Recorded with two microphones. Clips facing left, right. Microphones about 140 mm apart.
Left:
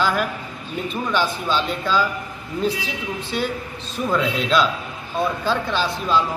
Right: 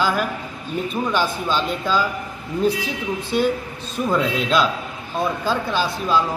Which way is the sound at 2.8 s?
50° right (ahead or behind).